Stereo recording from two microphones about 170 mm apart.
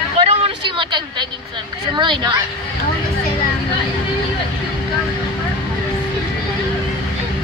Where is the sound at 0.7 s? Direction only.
30° right (ahead or behind).